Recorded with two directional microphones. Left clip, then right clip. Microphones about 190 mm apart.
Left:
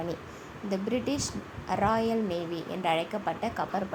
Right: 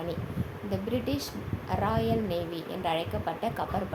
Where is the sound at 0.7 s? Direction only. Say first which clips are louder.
Left 1 dB; 25° left (ahead or behind).